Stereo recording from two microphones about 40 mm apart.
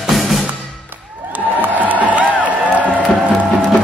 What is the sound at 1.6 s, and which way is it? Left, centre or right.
Music, right.